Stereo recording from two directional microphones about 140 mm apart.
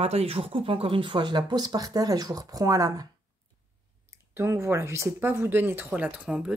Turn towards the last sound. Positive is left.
turn(degrees=-5)  # may be behind; listen again after turning